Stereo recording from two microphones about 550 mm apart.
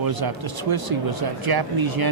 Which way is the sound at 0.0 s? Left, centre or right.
Right.